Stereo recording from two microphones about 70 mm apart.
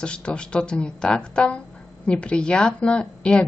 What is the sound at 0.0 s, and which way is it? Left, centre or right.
A woman's voice, centre.